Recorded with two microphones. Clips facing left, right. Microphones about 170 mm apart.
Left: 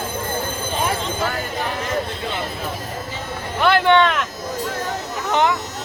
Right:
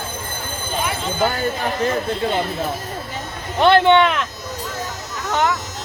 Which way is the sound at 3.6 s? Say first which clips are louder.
Right 3 dB; 25° right (ahead or behind).